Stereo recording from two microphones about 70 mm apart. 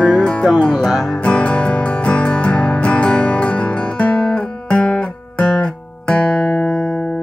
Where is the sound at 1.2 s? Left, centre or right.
Centre.